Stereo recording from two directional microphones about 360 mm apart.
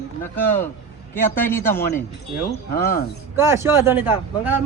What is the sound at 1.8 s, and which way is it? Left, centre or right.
Speech, left.